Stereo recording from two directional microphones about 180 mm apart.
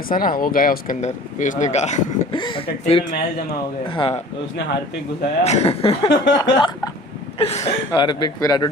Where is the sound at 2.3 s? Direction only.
25° left (ahead or behind).